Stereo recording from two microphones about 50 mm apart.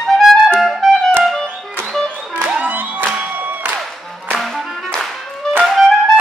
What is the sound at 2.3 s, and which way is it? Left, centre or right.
Music, right.